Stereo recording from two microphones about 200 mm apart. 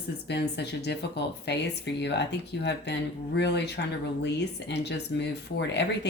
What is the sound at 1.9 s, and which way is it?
Speech, 60° left (ahead or behind).